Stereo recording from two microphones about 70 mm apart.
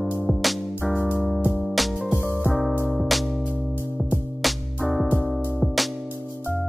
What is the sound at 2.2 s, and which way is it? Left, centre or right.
Music, right.